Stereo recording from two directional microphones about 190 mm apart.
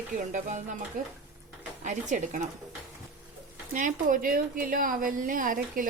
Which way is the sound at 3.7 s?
45° right (ahead or behind).